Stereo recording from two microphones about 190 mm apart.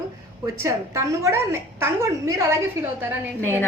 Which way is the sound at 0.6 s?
15° right (ahead or behind).